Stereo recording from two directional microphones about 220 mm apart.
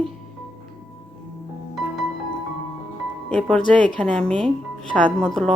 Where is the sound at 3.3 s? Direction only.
5° left (ahead or behind).